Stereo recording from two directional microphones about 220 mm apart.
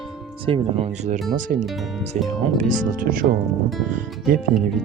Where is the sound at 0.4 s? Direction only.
25° right (ahead or behind).